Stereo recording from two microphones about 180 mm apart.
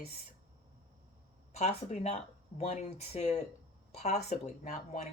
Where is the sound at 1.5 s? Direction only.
40° left (ahead or behind).